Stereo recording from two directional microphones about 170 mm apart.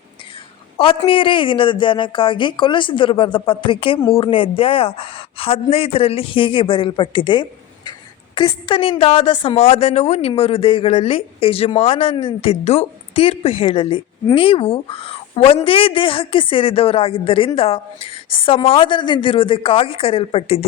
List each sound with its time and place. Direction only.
0.8 s speech: 30° left (ahead or behind)